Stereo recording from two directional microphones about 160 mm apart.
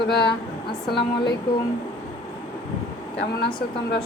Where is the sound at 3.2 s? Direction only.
80° left.